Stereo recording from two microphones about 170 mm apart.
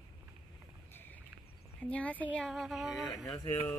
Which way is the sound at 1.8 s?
10° left (ahead or behind).